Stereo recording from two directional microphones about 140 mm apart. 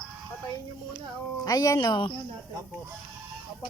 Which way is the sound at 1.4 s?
25° left (ahead or behind).